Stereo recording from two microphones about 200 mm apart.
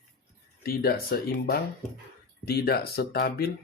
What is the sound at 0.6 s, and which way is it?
Speech, 50° left (ahead or behind).